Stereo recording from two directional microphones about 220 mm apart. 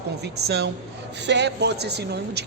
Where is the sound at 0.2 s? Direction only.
50° right (ahead or behind).